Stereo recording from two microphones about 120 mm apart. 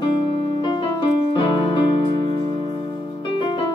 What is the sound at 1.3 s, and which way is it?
Keyboard, 45° left (ahead or behind).